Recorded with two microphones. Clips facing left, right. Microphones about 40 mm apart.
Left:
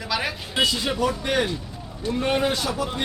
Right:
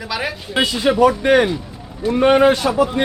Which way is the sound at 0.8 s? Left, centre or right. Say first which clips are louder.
Right 10 dB; right.